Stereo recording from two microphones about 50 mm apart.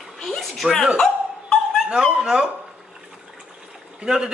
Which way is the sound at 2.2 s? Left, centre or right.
Centre.